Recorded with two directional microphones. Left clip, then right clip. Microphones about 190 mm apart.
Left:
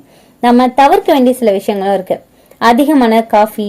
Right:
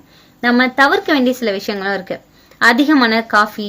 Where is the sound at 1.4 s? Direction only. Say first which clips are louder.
Left 7 dB; 60° left (ahead or behind).